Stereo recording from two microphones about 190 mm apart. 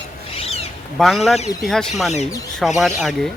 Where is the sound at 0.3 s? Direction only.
30° left (ahead or behind).